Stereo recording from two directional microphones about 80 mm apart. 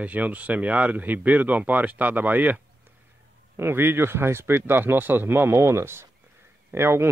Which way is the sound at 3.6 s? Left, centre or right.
Right.